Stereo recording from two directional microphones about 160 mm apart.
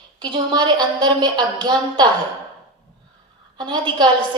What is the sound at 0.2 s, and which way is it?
A woman's voice, 25° right (ahead or behind).